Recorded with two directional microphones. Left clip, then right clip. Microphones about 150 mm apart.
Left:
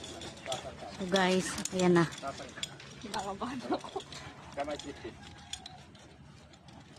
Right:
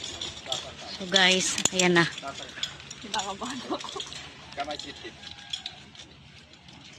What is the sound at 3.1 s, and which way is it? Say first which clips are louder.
Speech: right 5 dB; 25° right (ahead or behind).